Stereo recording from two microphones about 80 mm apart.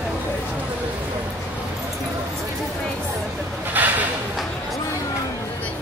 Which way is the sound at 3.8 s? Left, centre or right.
Right.